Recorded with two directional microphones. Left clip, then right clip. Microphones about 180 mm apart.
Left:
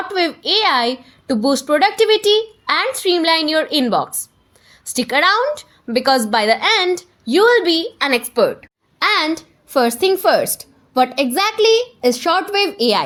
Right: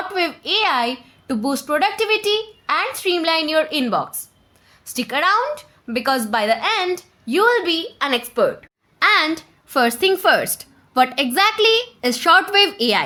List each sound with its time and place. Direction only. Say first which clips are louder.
0.1 s a woman's voice: left 4 dB; 20° left (ahead or behind); by 13.0 s centre (ahead or behind)